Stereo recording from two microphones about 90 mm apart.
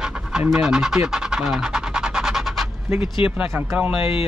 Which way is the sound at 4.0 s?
90° left.